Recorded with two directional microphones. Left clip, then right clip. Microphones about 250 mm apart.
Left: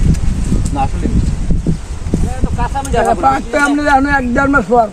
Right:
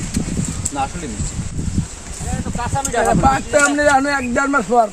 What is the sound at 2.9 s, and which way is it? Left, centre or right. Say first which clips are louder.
Speech: left 3 dB; centre.